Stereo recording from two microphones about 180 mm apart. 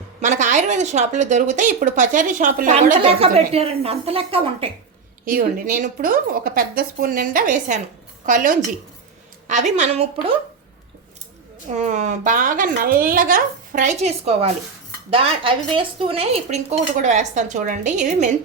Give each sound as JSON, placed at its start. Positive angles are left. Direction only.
{"t": 0.2, "sound": "a woman's voice", "side_deg": -45}
{"t": 3.0, "sound": "a woman's voice", "side_deg": -30}
{"t": 5.2, "sound": "a woman's voice", "side_deg": -50}
{"t": 11.8, "sound": "a woman's voice", "side_deg": -40}